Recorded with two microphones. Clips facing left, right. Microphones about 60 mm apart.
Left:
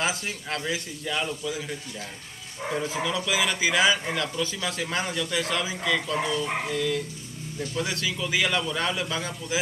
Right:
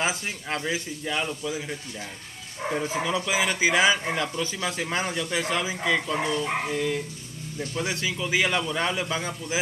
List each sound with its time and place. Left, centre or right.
0.6 s a man's voice: centre
2.9 s speech: right
3.8 s a man's voice: centre
4.1 s a man's voice: right
5.0 s a man's voice: centre
5.3 s a man's voice: centre